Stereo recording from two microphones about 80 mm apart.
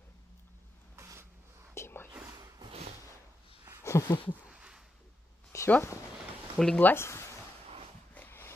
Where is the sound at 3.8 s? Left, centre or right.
Left.